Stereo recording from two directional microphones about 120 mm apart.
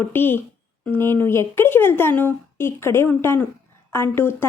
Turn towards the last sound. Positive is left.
turn(degrees=20)  # may be behind; listen again after turning